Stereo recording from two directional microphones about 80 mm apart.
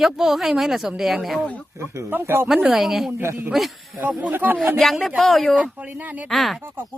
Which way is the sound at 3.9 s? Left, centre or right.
Centre.